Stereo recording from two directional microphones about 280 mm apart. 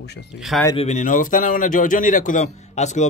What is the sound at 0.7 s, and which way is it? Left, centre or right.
A man's voice, left.